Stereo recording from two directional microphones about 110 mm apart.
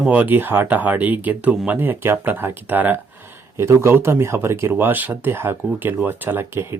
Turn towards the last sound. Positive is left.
turn(degrees=-20)  # may be behind; listen again after turning